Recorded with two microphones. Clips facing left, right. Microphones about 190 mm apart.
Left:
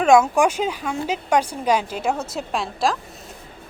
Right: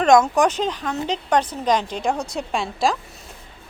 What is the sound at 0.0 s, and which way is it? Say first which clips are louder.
A woman's voice: even; 5° left (ahead or behind).